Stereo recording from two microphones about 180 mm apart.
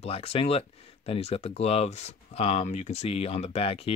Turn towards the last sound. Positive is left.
turn(degrees=35)  # may be behind; listen again after turning